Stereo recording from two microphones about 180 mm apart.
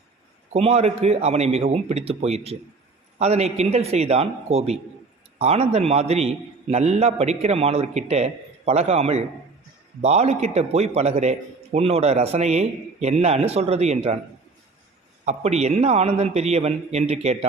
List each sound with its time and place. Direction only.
0.5 s a man's voice: 35° right (ahead or behind)
15.2 s a man's voice: 40° right (ahead or behind)